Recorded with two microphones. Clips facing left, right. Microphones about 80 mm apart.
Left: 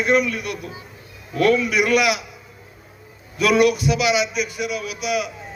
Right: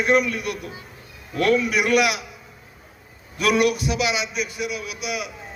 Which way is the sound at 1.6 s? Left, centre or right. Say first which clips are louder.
Left 1 dB; right.